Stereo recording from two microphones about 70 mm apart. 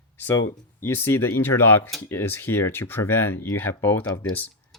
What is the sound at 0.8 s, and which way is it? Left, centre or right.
Speech, left.